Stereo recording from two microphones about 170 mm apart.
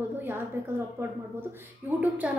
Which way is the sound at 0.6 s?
10° right (ahead or behind).